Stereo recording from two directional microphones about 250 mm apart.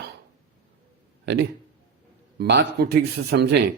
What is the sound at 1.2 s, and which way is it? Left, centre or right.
Speech, right.